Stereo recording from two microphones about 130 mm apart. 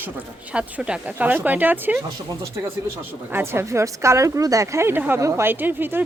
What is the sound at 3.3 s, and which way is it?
Speech, 20° right (ahead or behind).